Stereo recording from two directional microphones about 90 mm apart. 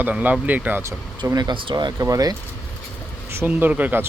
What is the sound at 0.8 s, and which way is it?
Speech, 35° right (ahead or behind).